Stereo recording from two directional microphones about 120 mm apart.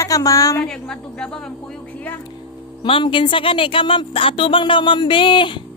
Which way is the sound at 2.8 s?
45° left (ahead or behind).